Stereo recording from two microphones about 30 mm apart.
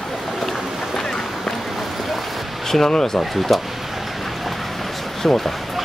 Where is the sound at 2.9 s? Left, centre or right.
Left.